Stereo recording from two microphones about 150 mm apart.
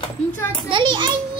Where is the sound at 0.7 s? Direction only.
30° right (ahead or behind).